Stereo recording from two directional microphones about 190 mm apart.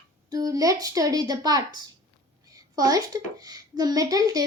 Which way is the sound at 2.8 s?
20° right (ahead or behind).